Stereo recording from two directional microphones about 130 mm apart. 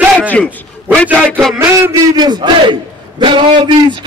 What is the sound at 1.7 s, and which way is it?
A man's voice, 30° right (ahead or behind).